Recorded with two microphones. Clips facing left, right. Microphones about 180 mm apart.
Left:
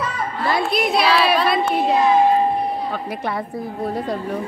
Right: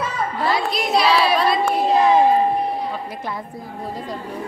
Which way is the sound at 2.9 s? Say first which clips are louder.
Left 3 dB; 70° left (ahead or behind).